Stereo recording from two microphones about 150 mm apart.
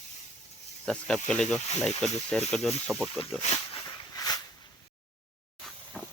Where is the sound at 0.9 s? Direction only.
5° left (ahead or behind).